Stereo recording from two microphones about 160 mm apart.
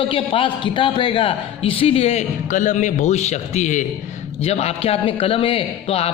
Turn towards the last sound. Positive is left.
turn(degrees=40)  # may be behind; listen again after turning